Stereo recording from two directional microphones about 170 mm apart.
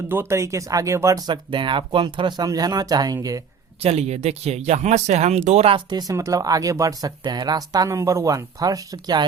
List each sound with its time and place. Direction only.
0.1 s speech: 15° right (ahead or behind)
3.8 s speech: 40° right (ahead or behind); by 9.2 s 25° right (ahead or behind)